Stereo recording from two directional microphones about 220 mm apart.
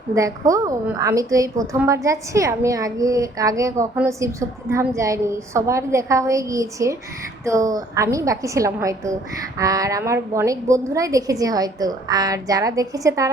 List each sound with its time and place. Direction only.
0.1 s a woman's voice: 15° right (ahead or behind)